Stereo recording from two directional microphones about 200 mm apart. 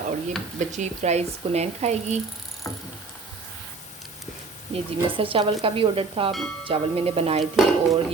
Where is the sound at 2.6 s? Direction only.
15° left (ahead or behind).